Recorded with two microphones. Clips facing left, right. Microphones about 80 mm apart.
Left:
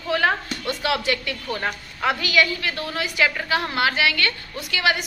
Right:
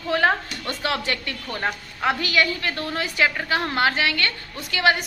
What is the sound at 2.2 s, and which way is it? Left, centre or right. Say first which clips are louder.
Speech: left 1 dB; right.